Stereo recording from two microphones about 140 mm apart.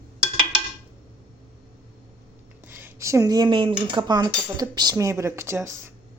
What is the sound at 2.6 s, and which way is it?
Speech, 15° right (ahead or behind).